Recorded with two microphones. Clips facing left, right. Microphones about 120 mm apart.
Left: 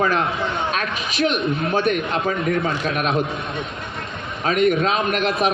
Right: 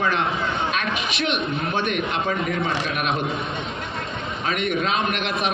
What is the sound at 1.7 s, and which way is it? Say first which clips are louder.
Speech: left 4 dB; 40° left (ahead or behind).